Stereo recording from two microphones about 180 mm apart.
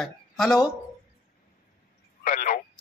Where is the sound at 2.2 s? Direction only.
50° left (ahead or behind).